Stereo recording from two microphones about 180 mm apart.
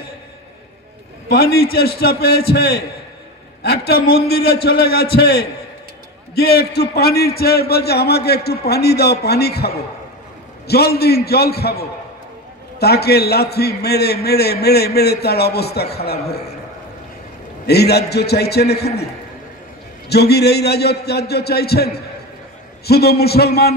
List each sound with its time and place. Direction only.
1.3 s a man's voice: 60° left (ahead or behind)
17.6 s a man's voice: 65° left (ahead or behind)
20.1 s a man's voice: 65° left (ahead or behind)